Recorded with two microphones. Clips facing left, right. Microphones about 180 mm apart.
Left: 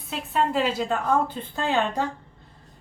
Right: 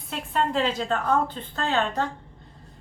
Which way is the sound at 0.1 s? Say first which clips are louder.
Left 1 dB; 5° left (ahead or behind).